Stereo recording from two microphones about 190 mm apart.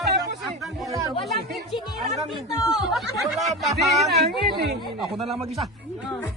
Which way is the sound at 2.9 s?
Centre (ahead or behind).